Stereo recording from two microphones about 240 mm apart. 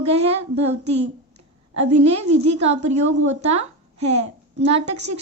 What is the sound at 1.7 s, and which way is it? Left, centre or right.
A woman's voice, right.